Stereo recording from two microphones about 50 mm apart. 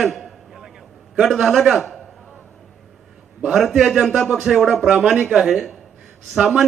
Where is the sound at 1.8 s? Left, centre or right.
Centre.